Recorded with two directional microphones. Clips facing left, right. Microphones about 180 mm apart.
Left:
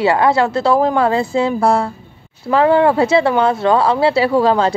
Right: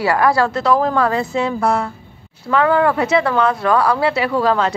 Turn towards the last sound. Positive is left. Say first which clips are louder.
# left 3 dB
turn(degrees=30)  # may be behind; listen again after turning